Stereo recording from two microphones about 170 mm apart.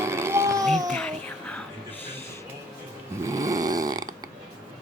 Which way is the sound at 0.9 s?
5° left (ahead or behind).